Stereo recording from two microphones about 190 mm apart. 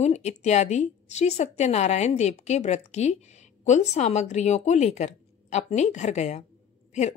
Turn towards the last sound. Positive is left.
turn(degrees=35)  # may be behind; listen again after turning